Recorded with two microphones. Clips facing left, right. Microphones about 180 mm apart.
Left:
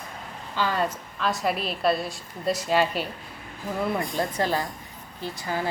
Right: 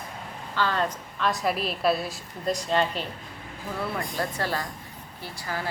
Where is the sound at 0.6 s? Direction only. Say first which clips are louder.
Left 1 dB; 10° left (ahead or behind).